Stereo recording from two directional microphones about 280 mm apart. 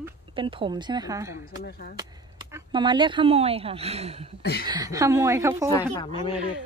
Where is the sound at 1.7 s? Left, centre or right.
Left.